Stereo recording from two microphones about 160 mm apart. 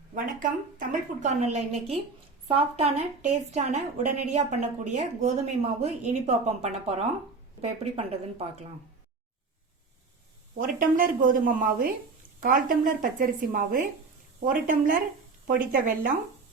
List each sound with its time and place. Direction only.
0.1 s a woman's voice: 55° right (ahead or behind)
10.6 s a woman's voice: 60° right (ahead or behind)